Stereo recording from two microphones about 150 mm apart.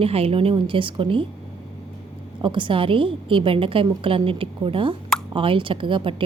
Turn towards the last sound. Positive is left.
turn(degrees=-35)  # may be behind; listen again after turning